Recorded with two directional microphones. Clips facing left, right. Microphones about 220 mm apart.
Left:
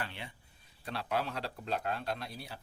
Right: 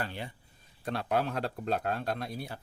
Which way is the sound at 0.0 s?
40° right (ahead or behind).